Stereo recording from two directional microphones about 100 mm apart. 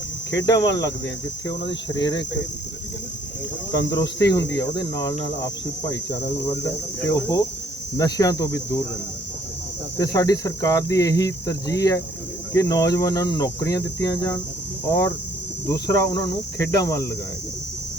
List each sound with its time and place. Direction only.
0.3 s cricket: 45° left (ahead or behind)
2.0 s speech: 45° left (ahead or behind)
3.7 s cricket: 40° left (ahead or behind)
10.0 s cricket: 35° left (ahead or behind)